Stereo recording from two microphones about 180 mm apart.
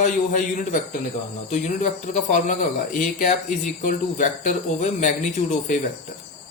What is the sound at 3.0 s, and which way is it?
Speech, 45° left (ahead or behind).